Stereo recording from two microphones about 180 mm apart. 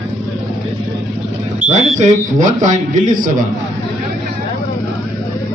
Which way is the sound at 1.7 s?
40° right (ahead or behind).